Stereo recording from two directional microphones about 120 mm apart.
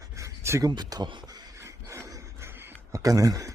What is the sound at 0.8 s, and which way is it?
Speech, 35° right (ahead or behind).